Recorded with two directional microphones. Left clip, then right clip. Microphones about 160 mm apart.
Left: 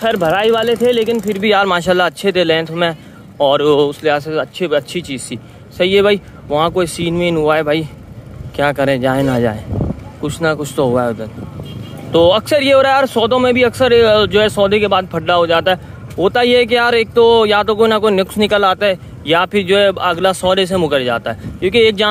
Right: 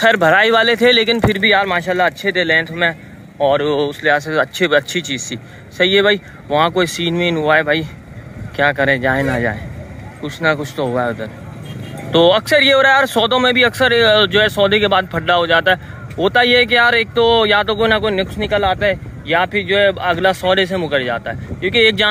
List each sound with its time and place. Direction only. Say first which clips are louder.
0.0 s speech: right 2 dB; centre (ahead or behind)
1.6 s a man's voice: left 3 dB; 50° left (ahead or behind); by 4.3 s 25° left (ahead or behind)
4.3 s a man's voice: right 2 dB; 10° left (ahead or behind); by 18.1 s 35° left (ahead or behind)
18.1 s speech: left 4 dB; 55° left (ahead or behind); by 22.0 s 30° left (ahead or behind)